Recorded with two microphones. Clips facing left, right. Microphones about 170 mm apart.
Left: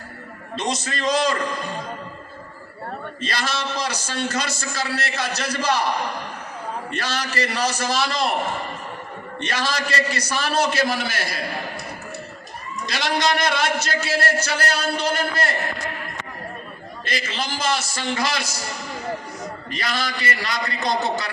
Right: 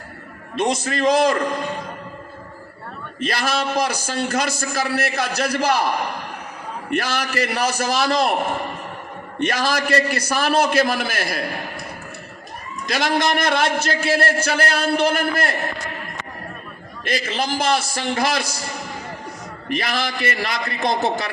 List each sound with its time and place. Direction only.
0.5 s a man's voice: 55° right (ahead or behind)
3.2 s a man's voice: 55° right (ahead or behind)
6.9 s a man's voice: 55° right (ahead or behind)
9.4 s a man's voice: 55° right (ahead or behind)
12.9 s a man's voice: 50° right (ahead or behind)
17.1 s a man's voice: 55° right (ahead or behind)
19.6 s a man's voice: 55° right (ahead or behind)